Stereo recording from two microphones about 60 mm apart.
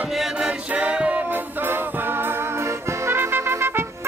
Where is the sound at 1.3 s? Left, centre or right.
Right.